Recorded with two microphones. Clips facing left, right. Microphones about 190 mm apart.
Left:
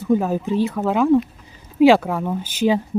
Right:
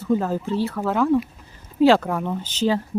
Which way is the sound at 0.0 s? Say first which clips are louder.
Left 3 dB; 15° left (ahead or behind).